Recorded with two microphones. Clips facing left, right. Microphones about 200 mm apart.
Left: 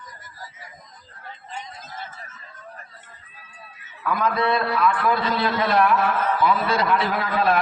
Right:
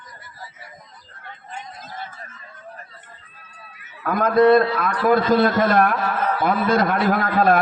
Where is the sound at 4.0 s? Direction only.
50° right (ahead or behind).